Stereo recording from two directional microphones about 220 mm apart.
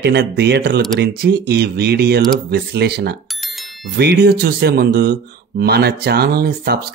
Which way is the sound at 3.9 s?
45° right (ahead or behind).